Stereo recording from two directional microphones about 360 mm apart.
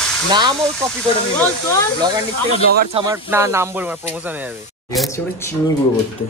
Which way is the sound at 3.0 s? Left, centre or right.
Centre.